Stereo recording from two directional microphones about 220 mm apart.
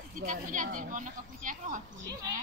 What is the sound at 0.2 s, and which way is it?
Speech, 35° right (ahead or behind).